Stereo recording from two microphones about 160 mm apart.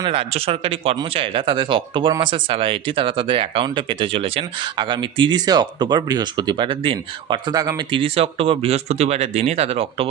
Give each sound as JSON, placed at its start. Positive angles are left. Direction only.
{"t": 0.0, "sound": "speech", "side_deg": -35}